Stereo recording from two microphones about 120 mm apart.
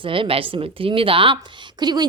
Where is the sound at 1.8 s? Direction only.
35° right (ahead or behind).